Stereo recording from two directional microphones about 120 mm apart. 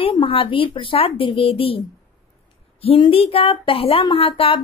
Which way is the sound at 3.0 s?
50° left (ahead or behind).